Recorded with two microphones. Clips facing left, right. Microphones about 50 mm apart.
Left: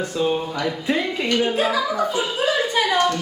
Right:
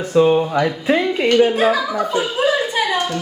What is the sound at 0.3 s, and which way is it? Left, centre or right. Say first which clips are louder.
Speech: right 7 dB; right.